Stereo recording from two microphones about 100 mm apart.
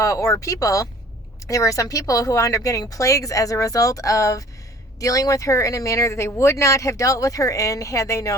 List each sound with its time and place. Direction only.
0.0 s speech: 35° left (ahead or behind)